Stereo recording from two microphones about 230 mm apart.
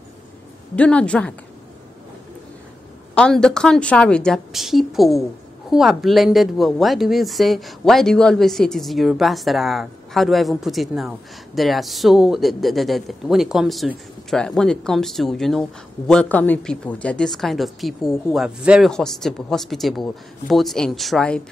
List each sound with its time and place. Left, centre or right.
0.7 s speech: centre
3.2 s speech: centre